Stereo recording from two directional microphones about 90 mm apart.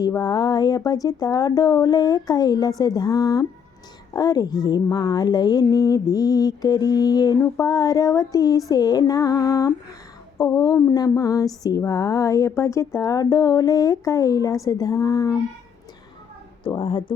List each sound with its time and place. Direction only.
0.2 s speech: 45° left (ahead or behind)
16.6 s speech: 70° left (ahead or behind)